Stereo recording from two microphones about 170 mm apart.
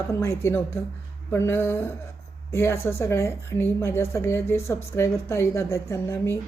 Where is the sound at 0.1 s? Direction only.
15° left (ahead or behind).